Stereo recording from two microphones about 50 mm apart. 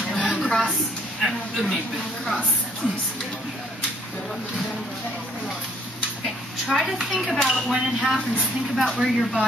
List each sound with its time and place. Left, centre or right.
0.0 s a sound: centre
1.2 s speech: centre
6.2 s speech: centre
7.7 s speech: centre